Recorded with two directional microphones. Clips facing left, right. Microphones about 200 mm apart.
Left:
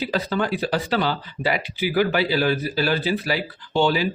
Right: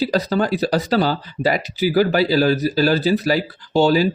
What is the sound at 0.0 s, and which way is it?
Speech, 40° right (ahead or behind).